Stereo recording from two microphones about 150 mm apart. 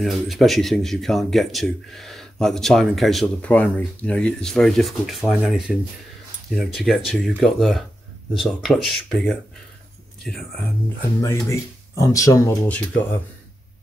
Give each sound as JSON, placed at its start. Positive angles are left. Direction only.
{"t": 0.0, "sound": "speech", "side_deg": 0}
{"t": 11.1, "sound": "speech", "side_deg": 20}